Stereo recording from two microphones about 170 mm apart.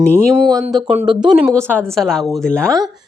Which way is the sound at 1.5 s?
5° left (ahead or behind).